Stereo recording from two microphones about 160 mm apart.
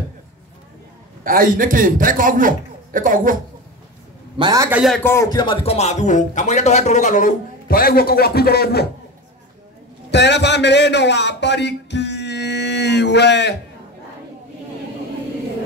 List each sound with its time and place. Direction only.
1.2 s a man's voice: 60° right (ahead or behind)
4.4 s a man's voice: 25° right (ahead or behind)
4.6 s a man's voice: 10° right (ahead or behind)
4.9 s speech: 15° left (ahead or behind); by 8.8 s 80° left
10.1 s speech: 90° left